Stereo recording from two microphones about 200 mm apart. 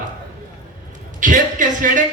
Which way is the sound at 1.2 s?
40° right (ahead or behind).